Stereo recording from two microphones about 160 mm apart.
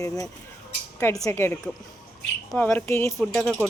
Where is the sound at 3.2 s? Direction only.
Centre (ahead or behind).